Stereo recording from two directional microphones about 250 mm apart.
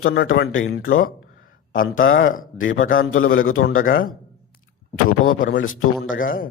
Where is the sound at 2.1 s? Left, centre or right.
Left.